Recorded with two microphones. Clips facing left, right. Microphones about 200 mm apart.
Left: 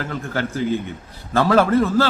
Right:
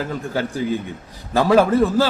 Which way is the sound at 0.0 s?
15° right (ahead or behind).